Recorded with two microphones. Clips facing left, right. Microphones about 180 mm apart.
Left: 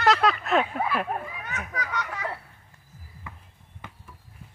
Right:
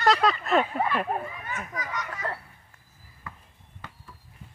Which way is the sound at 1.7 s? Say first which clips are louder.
Left 2 dB; 70° left (ahead or behind).